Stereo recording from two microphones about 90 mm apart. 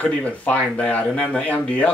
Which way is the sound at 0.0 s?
15° left (ahead or behind).